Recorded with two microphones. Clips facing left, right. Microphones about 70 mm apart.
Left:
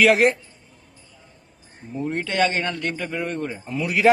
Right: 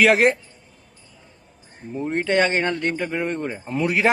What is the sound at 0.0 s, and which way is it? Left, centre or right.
Speech, right.